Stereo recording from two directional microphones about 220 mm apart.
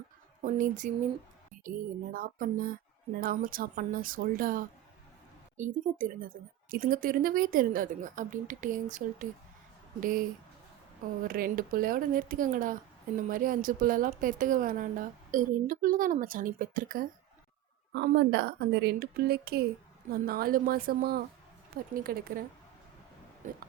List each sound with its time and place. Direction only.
0.4 s a woman's voice: 35° right (ahead or behind)
17.9 s a woman's voice: 50° right (ahead or behind)